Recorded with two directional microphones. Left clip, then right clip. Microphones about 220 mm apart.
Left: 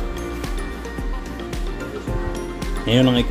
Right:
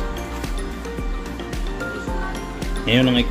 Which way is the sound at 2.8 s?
25° left (ahead or behind).